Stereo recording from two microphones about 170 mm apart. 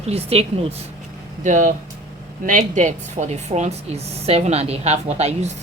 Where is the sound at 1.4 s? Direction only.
45° right (ahead or behind).